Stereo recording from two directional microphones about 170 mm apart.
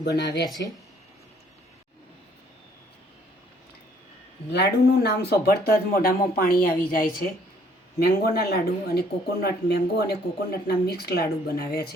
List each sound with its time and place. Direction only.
0.0 s speech: 70° left (ahead or behind)
4.5 s speech: 75° left (ahead or behind)